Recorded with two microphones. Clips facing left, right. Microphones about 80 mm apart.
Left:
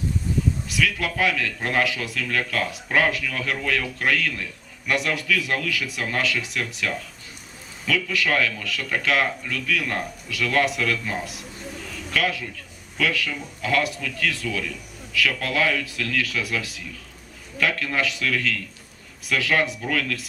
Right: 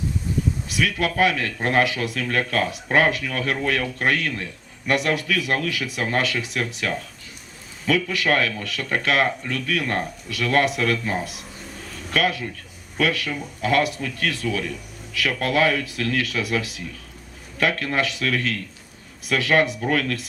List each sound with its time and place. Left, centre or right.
0.7 s speech: right
6.0 s speech: right
11.8 s a sound: right
13.0 s speech: right
19.3 s speech: right
19.8 s speech: right